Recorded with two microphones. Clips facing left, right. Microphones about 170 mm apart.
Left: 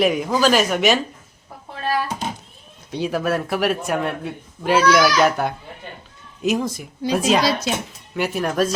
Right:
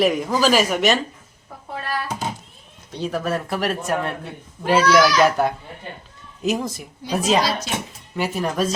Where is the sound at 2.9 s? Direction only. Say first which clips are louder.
Left 3 dB; 5° left (ahead or behind).